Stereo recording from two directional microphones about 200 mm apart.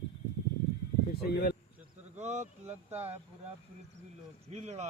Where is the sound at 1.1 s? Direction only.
50° left (ahead or behind).